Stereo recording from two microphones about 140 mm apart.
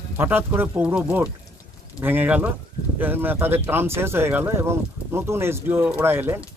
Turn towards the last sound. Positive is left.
turn(degrees=-15)  # may be behind; listen again after turning